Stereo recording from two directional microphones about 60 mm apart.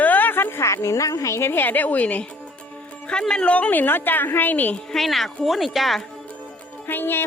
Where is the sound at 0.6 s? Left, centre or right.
Left.